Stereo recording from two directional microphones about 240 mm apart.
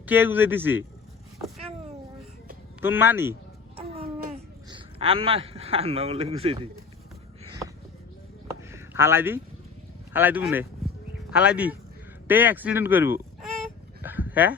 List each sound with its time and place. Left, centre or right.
0.0 s speech: centre
2.8 s speech: centre
3.8 s a sound: right
4.7 s speech: right
8.7 s a sound: centre
10.1 s speech: centre
14.0 s dog: centre